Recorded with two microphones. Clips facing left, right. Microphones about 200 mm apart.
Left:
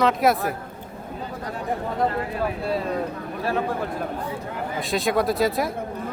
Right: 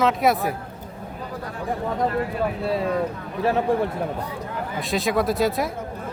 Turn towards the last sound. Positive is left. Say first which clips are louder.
# even
turn(degrees=0)  # may be behind; listen again after turning